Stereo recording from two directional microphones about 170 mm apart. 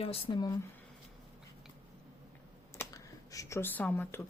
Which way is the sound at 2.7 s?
20° left (ahead or behind).